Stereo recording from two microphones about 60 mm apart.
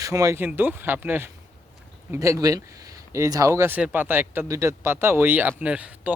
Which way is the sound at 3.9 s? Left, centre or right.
Right.